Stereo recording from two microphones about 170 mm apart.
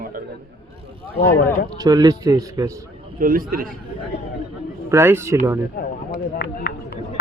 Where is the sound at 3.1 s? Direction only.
55° right (ahead or behind).